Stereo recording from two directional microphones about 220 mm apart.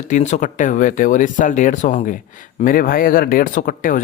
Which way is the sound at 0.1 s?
35° left (ahead or behind).